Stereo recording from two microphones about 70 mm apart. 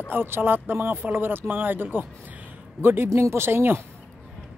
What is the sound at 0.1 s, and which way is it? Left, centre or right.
A woman's voice, right.